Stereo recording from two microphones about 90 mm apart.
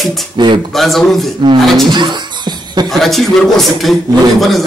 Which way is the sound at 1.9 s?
55° right (ahead or behind).